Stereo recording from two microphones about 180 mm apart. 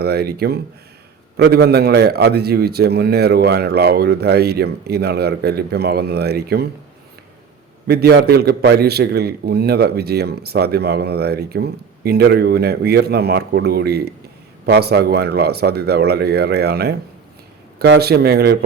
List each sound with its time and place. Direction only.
0.0 s a man's voice: 60° right (ahead or behind)
7.9 s a man's voice: 60° right (ahead or behind)